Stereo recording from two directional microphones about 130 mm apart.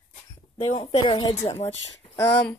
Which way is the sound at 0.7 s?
40° left (ahead or behind).